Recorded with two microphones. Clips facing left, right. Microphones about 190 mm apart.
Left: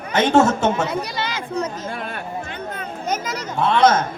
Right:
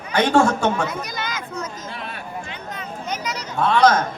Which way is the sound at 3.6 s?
25° left (ahead or behind).